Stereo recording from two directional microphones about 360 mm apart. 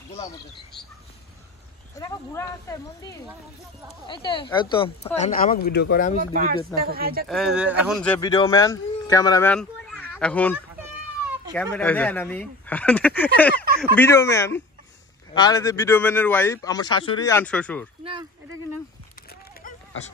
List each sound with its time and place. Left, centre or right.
2.0 s speech: centre; by 6.1 s left
6.3 s speech: right
7.2 s speech: centre
19.6 s a sound: left